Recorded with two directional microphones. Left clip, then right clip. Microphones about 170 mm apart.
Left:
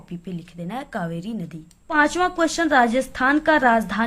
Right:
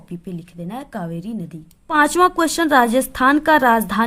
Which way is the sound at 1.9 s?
45° right (ahead or behind).